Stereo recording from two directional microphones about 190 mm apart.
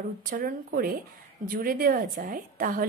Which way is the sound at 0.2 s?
45° right (ahead or behind).